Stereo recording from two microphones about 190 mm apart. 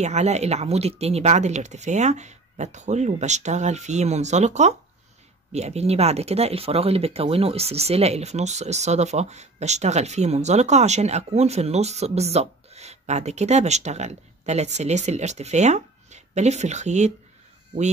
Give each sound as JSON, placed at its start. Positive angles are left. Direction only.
{"t": 0.0, "sound": "speech", "side_deg": -35}